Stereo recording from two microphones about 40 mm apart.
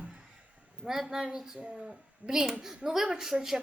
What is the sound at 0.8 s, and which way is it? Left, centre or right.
A woman's voice, centre.